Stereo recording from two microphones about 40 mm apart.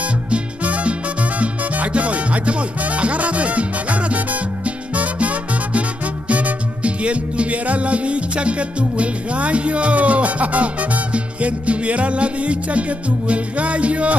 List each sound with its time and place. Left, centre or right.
0.3 s music: right